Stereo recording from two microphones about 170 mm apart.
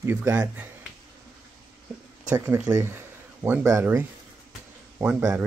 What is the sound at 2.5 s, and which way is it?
Speech, 10° right (ahead or behind).